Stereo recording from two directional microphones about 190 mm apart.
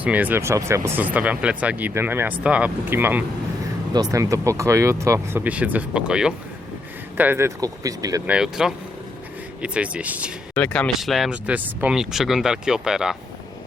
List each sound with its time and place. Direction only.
0.0 s speech: 10° right (ahead or behind)
8.3 s speech: 5° right (ahead or behind)
10.5 s speech: 5° left (ahead or behind)